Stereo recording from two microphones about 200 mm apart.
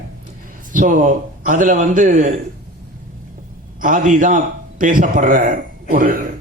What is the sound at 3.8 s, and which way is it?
A man's voice, 40° right (ahead or behind).